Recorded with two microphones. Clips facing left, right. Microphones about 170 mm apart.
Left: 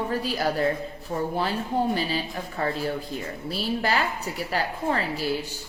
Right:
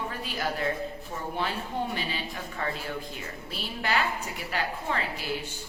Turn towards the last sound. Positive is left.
turn(degrees=35)  # may be behind; listen again after turning